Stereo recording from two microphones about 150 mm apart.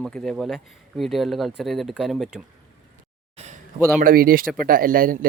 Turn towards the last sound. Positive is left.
turn(degrees=-70)  # may be behind; listen again after turning